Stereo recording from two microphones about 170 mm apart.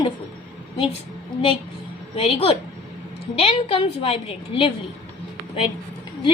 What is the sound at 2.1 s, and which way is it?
A woman's voice, 35° left (ahead or behind).